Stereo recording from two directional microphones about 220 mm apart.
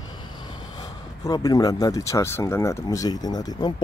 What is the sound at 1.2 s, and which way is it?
Speech, 15° left (ahead or behind).